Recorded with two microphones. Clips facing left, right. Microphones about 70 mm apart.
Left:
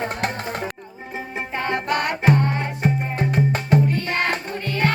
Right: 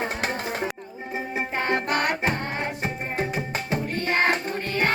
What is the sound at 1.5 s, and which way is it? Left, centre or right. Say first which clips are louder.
Music: left 2 dB; right.